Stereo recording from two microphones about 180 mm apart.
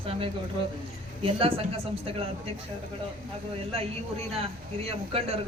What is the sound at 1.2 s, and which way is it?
A man's voice, 30° right (ahead or behind).